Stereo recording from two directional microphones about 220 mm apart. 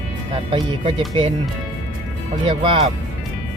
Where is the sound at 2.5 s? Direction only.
25° right (ahead or behind).